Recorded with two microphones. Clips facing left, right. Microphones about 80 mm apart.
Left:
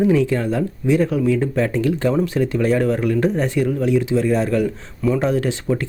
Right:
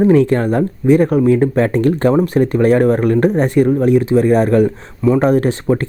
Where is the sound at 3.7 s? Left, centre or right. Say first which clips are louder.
Right 6 dB; right.